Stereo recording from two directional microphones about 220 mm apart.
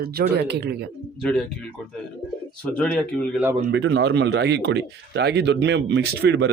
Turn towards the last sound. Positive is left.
turn(degrees=-50)  # may be behind; listen again after turning